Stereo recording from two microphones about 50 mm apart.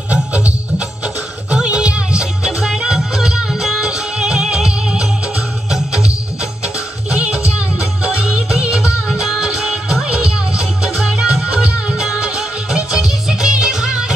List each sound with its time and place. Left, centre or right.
0.1 s music: right
7.1 s music: right
9.4 s music: centre
11.0 s music: centre